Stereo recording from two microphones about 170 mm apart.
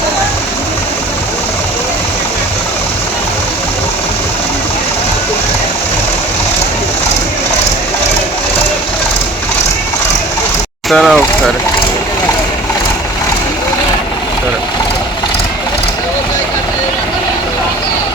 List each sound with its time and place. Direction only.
10.8 s speech: centre (ahead or behind)